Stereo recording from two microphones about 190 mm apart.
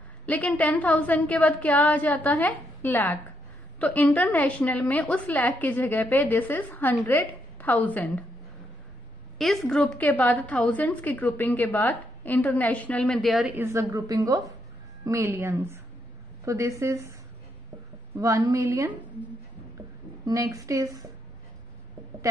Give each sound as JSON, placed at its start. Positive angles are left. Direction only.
{"t": 0.3, "sound": "a woman's voice", "side_deg": 5}
{"t": 9.4, "sound": "a woman's voice", "side_deg": 5}
{"t": 13.6, "sound": "a woman's voice", "side_deg": -15}
{"t": 18.2, "sound": "a woman's voice", "side_deg": -15}
{"t": 20.2, "sound": "a woman's voice", "side_deg": -15}